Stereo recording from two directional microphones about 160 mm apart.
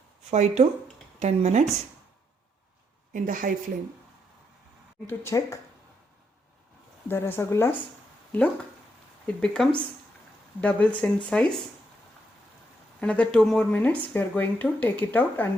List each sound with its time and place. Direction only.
0.3 s speech: 45° right (ahead or behind)
3.1 s a woman's voice: 55° right (ahead or behind)
5.0 s speech: 20° left (ahead or behind)
7.1 s speech: 15° left (ahead or behind)
9.2 s speech: 5° left (ahead or behind)
13.0 s speech: 5° left (ahead or behind)